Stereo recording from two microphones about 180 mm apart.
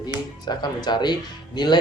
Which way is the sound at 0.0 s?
25° left (ahead or behind).